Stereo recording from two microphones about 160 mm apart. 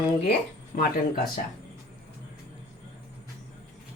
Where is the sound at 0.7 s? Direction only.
60° left (ahead or behind).